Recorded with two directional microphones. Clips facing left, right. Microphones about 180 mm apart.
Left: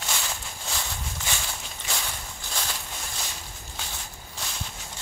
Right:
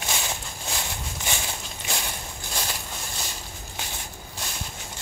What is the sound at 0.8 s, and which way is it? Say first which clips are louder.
Walk: right 2 dB; 15° right (ahead or behind).